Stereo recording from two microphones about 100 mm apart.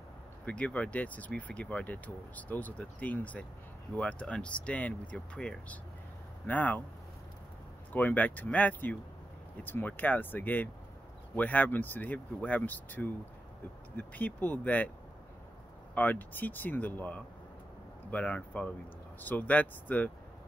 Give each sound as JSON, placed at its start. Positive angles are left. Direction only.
{"t": 0.5, "sound": "speech", "side_deg": 15}
{"t": 7.9, "sound": "speech", "side_deg": 15}
{"t": 15.9, "sound": "speech", "side_deg": 15}